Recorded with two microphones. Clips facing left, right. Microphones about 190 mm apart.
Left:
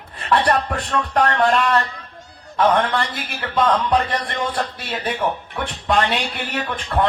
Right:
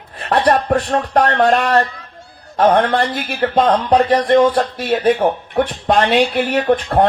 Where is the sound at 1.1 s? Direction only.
45° right (ahead or behind).